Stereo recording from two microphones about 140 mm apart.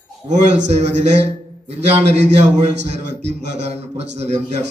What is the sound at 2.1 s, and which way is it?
A man's voice, 55° right (ahead or behind).